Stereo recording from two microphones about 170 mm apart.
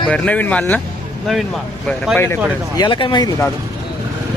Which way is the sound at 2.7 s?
25° left (ahead or behind).